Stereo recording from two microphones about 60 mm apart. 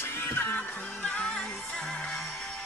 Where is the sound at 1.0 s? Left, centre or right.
Centre.